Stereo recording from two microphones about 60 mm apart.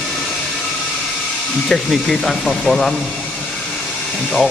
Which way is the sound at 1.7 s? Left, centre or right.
Centre.